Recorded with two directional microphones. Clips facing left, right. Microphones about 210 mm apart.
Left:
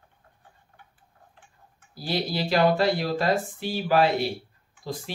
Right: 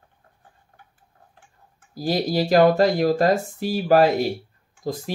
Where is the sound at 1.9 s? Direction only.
45° right (ahead or behind).